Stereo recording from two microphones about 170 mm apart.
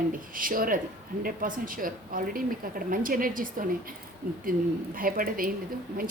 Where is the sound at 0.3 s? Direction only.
55° right (ahead or behind).